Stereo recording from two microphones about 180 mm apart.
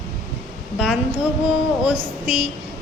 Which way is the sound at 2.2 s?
40° left (ahead or behind).